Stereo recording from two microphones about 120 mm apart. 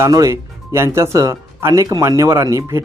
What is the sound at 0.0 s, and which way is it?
Speech, 25° right (ahead or behind).